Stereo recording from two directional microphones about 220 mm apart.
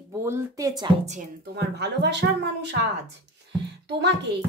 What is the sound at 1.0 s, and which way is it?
Speech, 35° right (ahead or behind).